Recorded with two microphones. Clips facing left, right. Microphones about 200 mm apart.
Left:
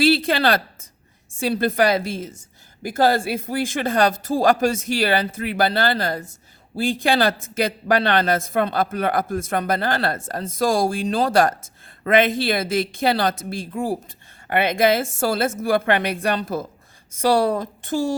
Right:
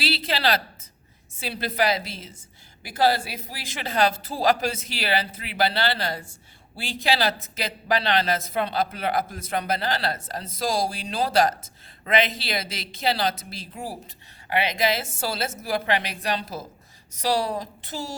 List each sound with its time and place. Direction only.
0.0 s a man's voice: 50° left (ahead or behind)